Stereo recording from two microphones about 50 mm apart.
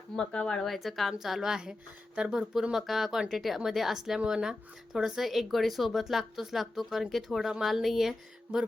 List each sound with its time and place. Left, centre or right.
0.2 s speech: centre
0.6 s speech: centre
2.7 s a woman's voice: centre
8.5 s music: right